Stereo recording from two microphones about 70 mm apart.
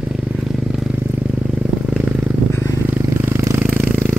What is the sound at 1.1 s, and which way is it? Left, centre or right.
Vehicle, right.